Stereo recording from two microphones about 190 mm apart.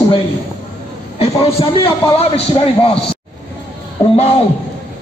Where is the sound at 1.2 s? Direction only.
30° left (ahead or behind).